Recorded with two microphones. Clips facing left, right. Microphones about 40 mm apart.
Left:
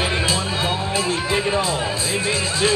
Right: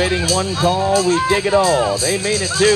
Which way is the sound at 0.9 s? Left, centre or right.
Right.